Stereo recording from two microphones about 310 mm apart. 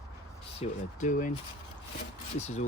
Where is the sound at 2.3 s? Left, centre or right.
Left.